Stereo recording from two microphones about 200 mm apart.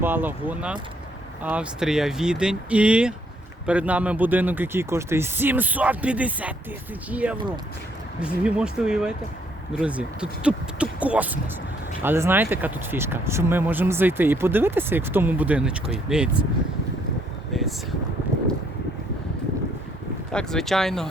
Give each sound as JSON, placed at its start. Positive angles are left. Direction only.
{"t": 0.0, "sound": "speech", "side_deg": -10}
{"t": 17.5, "sound": "wind", "side_deg": 0}
{"t": 20.3, "sound": "speech", "side_deg": 5}